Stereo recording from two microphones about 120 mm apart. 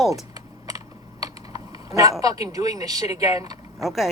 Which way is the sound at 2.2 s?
30° right (ahead or behind).